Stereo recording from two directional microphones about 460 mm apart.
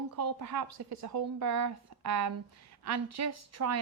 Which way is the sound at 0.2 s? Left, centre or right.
Right.